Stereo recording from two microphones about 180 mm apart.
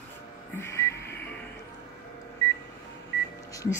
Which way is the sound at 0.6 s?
15° left (ahead or behind).